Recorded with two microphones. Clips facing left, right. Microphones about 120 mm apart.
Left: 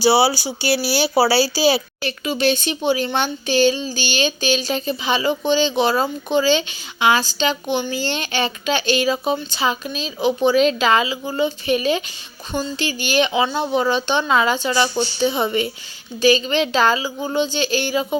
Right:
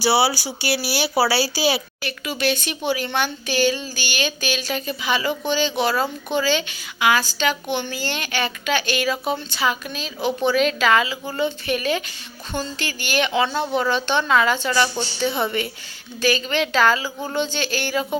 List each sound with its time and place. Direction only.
0.0 s speech: 25° left (ahead or behind)